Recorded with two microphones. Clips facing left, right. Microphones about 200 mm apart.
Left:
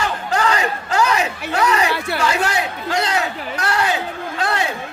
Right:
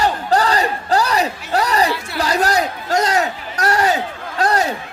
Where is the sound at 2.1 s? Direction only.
40° right (ahead or behind).